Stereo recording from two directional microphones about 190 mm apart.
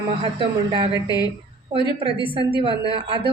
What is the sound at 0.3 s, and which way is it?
Speech, 25° right (ahead or behind).